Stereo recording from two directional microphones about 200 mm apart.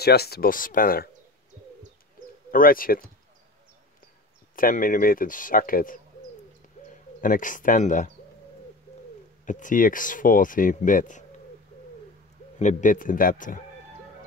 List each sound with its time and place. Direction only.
0.0 s speech: 50° left (ahead or behind)
2.5 s speech: 45° left (ahead or behind)
4.6 s speech: 45° left (ahead or behind)
7.2 s speech: 40° left (ahead or behind)
9.5 s speech: 40° left (ahead or behind)
12.5 s speech: 40° left (ahead or behind)